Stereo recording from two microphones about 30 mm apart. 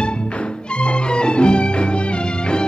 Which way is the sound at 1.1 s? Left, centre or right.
Left.